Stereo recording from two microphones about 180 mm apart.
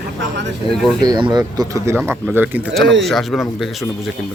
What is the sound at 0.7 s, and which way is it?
Speech, centre (ahead or behind).